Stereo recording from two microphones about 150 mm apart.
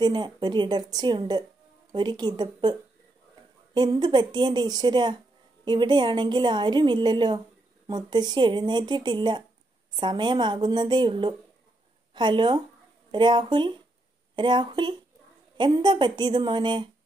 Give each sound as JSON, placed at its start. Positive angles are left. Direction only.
{"t": 0.0, "sound": "speech", "side_deg": -30}
{"t": 3.7, "sound": "a woman's voice", "side_deg": -30}